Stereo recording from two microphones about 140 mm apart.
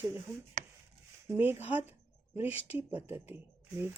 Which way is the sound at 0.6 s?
60° right (ahead or behind).